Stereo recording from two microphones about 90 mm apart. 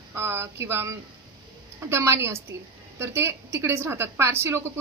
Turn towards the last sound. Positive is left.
turn(degrees=-30)  # may be behind; listen again after turning